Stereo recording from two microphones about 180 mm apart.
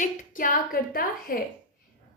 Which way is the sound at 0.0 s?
45° left (ahead or behind).